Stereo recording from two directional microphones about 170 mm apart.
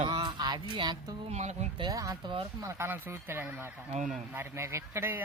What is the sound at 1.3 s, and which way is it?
Speech, 40° right (ahead or behind).